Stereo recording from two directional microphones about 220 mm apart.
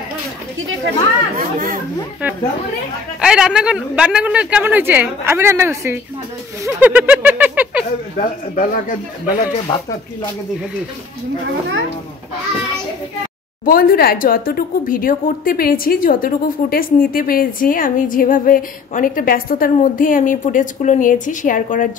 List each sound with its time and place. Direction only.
0.6 s speech: 60° right (ahead or behind)
1.4 s speech: 40° right (ahead or behind)
3.2 s speech: 5° right (ahead or behind)
6.6 s a sound: 5° right (ahead or behind)
8.2 s a woman's voice: 40° left (ahead or behind)
9.7 s speech: 25° left (ahead or behind)
13.7 s a woman's voice: 40° left (ahead or behind)